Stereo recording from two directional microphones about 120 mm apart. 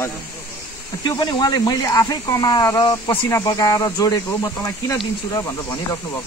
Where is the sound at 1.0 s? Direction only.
35° left (ahead or behind).